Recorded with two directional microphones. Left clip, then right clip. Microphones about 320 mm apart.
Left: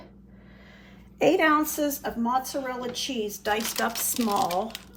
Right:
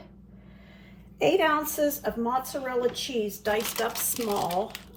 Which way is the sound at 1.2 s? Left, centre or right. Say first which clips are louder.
Left 2 dB; left.